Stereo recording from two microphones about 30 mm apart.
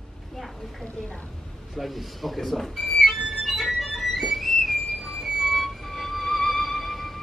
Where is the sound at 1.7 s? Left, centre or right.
Centre.